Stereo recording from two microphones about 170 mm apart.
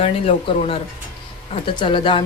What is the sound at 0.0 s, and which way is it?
Speech, 35° left (ahead or behind).